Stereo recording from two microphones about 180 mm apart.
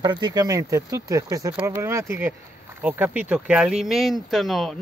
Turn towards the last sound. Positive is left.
turn(degrees=0)  # may be behind; listen again after turning